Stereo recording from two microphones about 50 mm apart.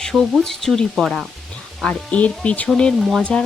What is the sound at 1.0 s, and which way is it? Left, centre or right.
Sizzle, centre.